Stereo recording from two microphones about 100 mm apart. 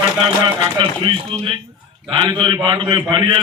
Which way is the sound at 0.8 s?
60° right (ahead or behind).